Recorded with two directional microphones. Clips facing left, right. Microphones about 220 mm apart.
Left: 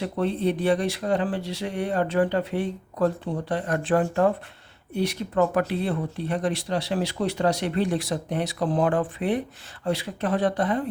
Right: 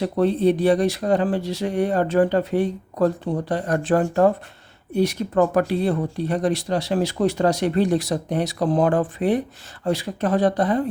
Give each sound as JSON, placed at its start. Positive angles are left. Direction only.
{"t": 0.0, "sound": "speech", "side_deg": -40}